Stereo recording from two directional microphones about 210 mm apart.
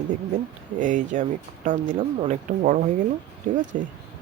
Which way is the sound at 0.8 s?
35° right (ahead or behind).